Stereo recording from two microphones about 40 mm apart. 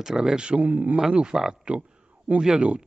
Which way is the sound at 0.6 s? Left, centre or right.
Right.